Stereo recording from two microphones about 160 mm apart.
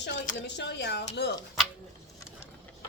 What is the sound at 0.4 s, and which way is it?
Speech, 90° left.